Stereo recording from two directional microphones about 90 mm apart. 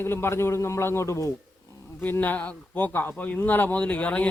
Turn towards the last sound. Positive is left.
turn(degrees=15)  # may be behind; listen again after turning